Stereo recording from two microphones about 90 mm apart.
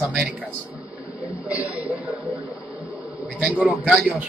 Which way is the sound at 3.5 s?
15° right (ahead or behind).